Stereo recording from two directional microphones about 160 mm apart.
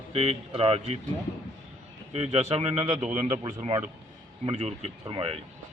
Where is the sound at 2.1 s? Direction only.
40° right (ahead or behind).